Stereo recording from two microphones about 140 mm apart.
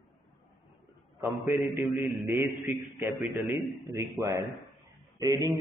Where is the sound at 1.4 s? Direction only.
20° right (ahead or behind).